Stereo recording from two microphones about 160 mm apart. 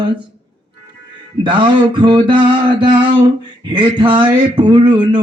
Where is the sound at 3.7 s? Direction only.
30° right (ahead or behind).